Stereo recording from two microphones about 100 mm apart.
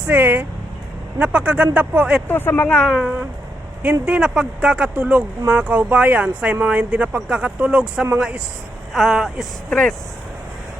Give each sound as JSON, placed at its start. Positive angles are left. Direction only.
{"t": 0.0, "sound": "speech", "side_deg": -20}
{"t": 2.2, "sound": "speech", "side_deg": 20}
{"t": 2.6, "sound": "speech", "side_deg": 5}
{"t": 2.9, "sound": "speech", "side_deg": -10}
{"t": 9.6, "sound": "speech", "side_deg": 10}